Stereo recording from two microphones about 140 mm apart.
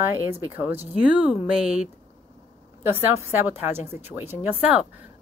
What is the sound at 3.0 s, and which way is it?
Speech, 15° right (ahead or behind).